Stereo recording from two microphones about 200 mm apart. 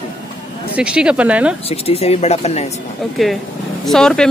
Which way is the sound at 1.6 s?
30° left (ahead or behind).